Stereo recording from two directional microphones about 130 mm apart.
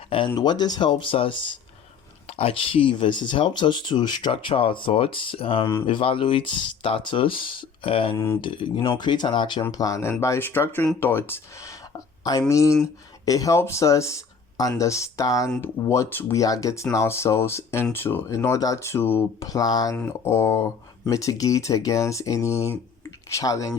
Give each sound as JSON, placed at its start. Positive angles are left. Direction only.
{"t": 0.3, "sound": "speech", "side_deg": 30}
{"t": 8.1, "sound": "speech", "side_deg": 25}
{"t": 8.4, "sound": "speech", "side_deg": 40}
{"t": 9.7, "sound": "speech", "side_deg": 25}
{"t": 12.2, "sound": "speech", "side_deg": 30}
{"t": 20.0, "sound": "speech", "side_deg": 20}